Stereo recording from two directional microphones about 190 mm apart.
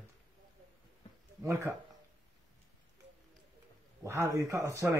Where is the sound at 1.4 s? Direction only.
15° right (ahead or behind).